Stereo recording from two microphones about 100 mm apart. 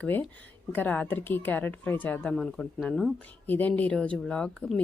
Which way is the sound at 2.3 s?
5° left (ahead or behind).